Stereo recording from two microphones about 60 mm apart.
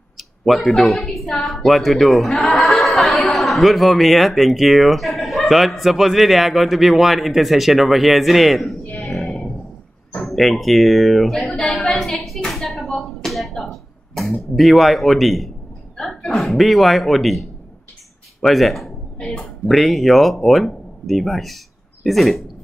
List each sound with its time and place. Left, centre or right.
0.2 s a woman's voice: centre
8.9 s a sound: centre
14.1 s a woman's voice: centre
19.1 s speech: centre
19.7 s a woman's voice: centre